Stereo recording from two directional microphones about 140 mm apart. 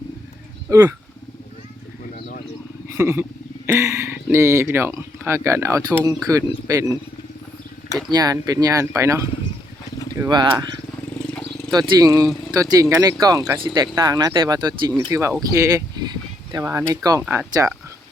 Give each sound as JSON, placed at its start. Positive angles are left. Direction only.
{"t": 0.7, "sound": "speech", "side_deg": -20}
{"t": 2.1, "sound": "a sound", "side_deg": 90}
{"t": 2.9, "sound": "speech", "side_deg": -15}
{"t": 8.1, "sound": "speech", "side_deg": -25}
{"t": 10.2, "sound": "speech", "side_deg": -30}
{"t": 11.7, "sound": "speech", "side_deg": -30}